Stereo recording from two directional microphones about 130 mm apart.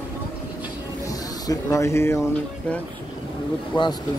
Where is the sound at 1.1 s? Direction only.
25° left (ahead or behind).